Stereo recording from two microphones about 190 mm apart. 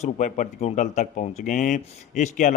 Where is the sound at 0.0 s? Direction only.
40° left (ahead or behind).